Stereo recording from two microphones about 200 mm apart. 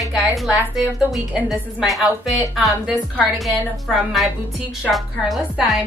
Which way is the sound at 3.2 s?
Centre (ahead or behind).